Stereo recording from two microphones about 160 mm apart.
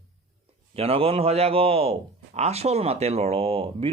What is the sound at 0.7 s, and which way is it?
Speech, 35° right (ahead or behind).